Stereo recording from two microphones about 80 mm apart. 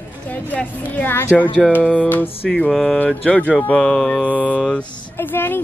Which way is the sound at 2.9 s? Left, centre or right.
Centre.